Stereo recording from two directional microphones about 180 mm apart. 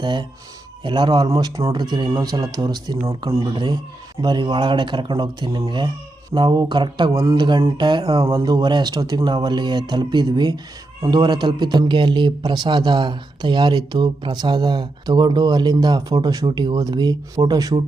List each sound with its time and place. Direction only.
0.0 s a man's voice: 25° right (ahead or behind)